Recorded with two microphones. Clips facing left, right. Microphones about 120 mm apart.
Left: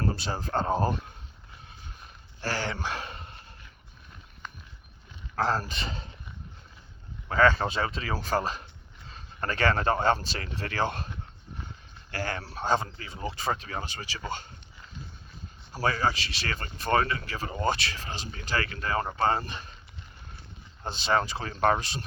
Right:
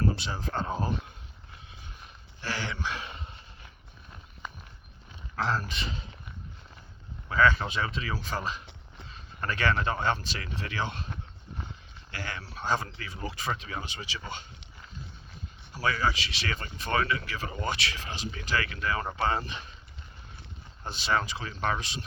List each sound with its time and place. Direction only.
0.0 s speech: 40° left (ahead or behind)
2.4 s a sound: 35° left (ahead or behind)
5.4 s speech: 35° left (ahead or behind)
7.3 s speech: 35° left (ahead or behind)
12.1 s speech: 40° left (ahead or behind)
15.7 s speech: 40° left (ahead or behind)
20.8 s speech: 30° left (ahead or behind)